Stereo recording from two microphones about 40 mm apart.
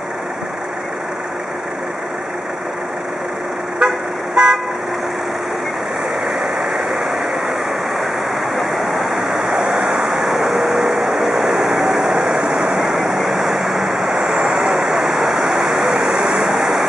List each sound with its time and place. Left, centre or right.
3.8 s vehicle: right
4.4 s car: right
6.2 s vehicle: centre
8.5 s waterfall: centre
14.6 s vehicle: centre
16.4 s waterfall: centre